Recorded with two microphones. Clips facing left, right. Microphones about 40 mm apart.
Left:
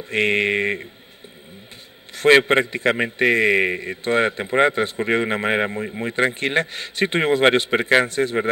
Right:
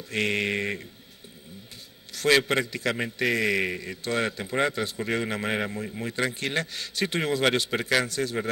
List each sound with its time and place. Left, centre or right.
0.1 s a man's voice: left
2.1 s a man's voice: left